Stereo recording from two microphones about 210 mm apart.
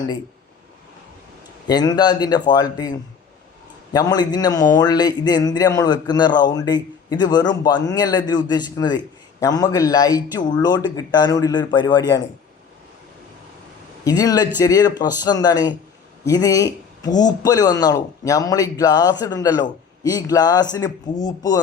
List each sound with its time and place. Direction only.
1.6 s a man's voice: 20° left (ahead or behind)
14.0 s a man's voice: 15° left (ahead or behind)